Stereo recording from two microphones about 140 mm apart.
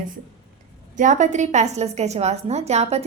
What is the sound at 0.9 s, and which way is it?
A woman's voice, 60° right (ahead or behind).